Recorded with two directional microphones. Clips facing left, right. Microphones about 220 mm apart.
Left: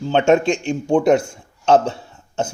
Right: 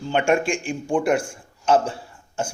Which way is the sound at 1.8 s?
25° left (ahead or behind).